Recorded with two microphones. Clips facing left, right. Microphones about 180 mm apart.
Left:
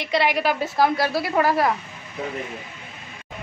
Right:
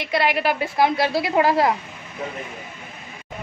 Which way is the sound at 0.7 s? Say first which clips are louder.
Right 2 dB; 20° right (ahead or behind).